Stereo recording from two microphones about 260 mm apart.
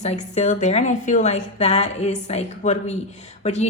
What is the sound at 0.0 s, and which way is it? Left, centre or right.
A woman's voice, left.